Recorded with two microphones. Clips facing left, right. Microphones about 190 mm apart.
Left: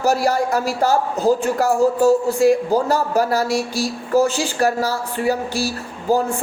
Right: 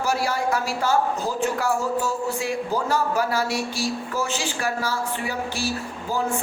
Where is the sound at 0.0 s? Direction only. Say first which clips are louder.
Left 6 dB; 40° left (ahead or behind).